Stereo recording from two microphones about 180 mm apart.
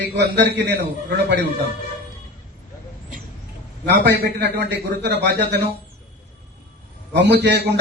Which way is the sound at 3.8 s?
70° right (ahead or behind).